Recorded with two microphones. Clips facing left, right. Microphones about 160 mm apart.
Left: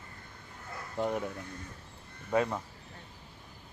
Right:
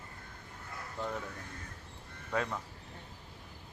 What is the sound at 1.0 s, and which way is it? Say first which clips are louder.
Speech: left 7 dB; 20° left (ahead or behind).